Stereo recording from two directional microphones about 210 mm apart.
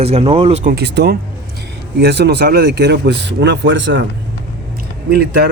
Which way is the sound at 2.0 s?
50° right (ahead or behind).